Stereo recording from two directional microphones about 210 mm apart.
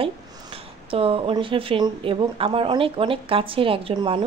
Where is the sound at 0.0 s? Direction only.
25° right (ahead or behind).